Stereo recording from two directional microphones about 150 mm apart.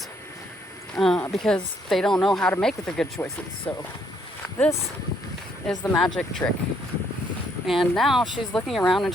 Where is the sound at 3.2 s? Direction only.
15° left (ahead or behind).